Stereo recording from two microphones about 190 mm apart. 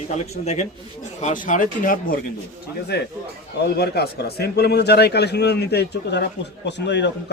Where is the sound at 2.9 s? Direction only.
60° left (ahead or behind).